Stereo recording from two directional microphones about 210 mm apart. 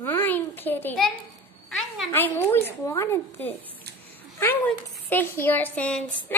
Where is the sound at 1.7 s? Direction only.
5° left (ahead or behind).